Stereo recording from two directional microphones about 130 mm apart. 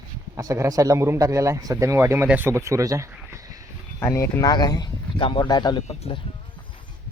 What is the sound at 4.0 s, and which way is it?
Speech, 25° left (ahead or behind).